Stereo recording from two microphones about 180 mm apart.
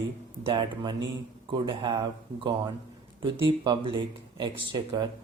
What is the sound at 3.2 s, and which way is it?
Speech, 30° right (ahead or behind).